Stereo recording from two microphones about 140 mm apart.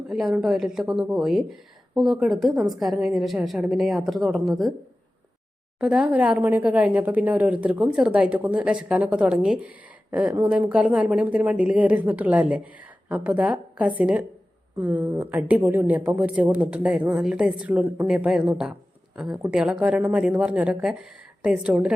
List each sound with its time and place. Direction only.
0.1 s a woman's voice: 5° right (ahead or behind)
5.8 s speech: 5° right (ahead or behind)